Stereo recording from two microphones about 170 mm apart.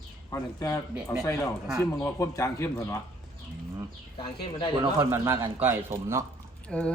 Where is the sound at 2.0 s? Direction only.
15° left (ahead or behind).